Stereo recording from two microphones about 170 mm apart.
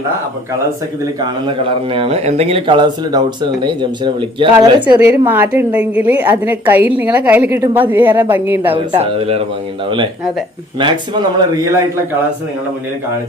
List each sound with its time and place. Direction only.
1.2 s a man's voice: 30° right (ahead or behind)
5.0 s a woman's voice: 10° right (ahead or behind)
8.7 s speech: 35° right (ahead or behind)
10.8 s a man's voice: 30° right (ahead or behind)